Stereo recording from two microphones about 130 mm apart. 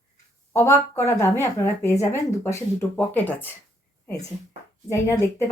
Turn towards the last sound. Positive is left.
turn(degrees=20)  # may be behind; listen again after turning